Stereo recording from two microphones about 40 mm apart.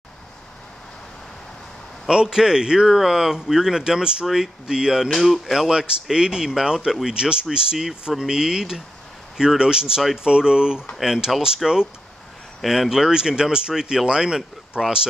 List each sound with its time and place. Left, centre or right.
2.2 s speech: centre
2.9 s speech: centre
5.1 s speech: centre
5.7 s speech: right